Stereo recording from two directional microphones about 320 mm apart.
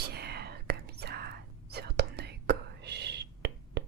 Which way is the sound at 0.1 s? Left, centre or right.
Right.